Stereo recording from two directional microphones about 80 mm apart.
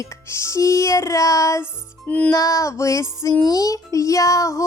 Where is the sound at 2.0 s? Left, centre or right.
Centre.